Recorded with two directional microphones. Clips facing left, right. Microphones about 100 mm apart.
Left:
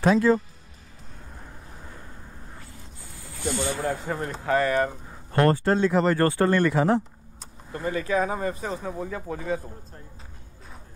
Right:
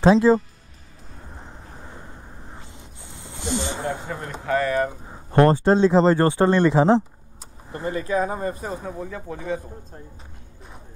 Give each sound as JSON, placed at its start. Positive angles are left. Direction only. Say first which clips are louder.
{"t": 0.0, "sound": "speech", "louder": "right 4 dB", "side_deg": -25}
{"t": 1.3, "sound": "vehicle", "louder": "right 4 dB", "side_deg": -25}
{"t": 2.5, "sound": "a sound", "louder": "right 2 dB", "side_deg": -25}
{"t": 4.6, "sound": "speech", "louder": "right 1 dB", "side_deg": -5}
{"t": 5.0, "sound": "speech", "louder": "right 8 dB", "side_deg": -25}
{"t": 8.2, "sound": "speech", "louder": "right 1 dB", "side_deg": -15}